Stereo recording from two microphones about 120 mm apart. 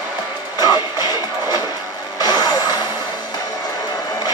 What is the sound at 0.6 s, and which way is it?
Music, 35° left (ahead or behind).